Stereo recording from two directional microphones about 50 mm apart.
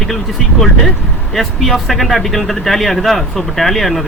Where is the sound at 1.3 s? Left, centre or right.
Centre.